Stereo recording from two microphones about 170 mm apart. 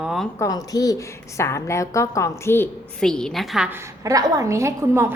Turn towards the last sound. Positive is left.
turn(degrees=-15)  # may be behind; listen again after turning